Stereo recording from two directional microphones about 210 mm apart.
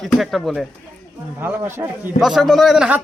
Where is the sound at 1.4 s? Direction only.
10° right (ahead or behind).